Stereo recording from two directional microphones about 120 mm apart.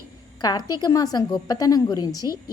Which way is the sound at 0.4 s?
35° left (ahead or behind).